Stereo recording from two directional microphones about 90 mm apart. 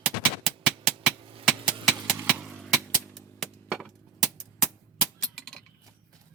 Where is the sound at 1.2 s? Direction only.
90° right.